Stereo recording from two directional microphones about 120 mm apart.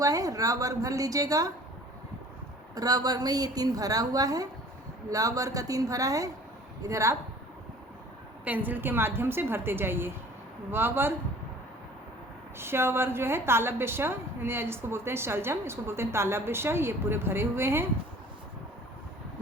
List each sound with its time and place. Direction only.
0.0 s a woman's voice: 30° right (ahead or behind)
2.7 s a woman's voice: 30° right (ahead or behind)
8.4 s a woman's voice: 15° right (ahead or behind)
12.5 s a woman's voice: 20° right (ahead or behind)